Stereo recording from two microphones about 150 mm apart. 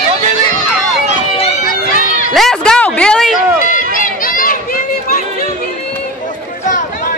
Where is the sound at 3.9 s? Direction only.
65° left (ahead or behind).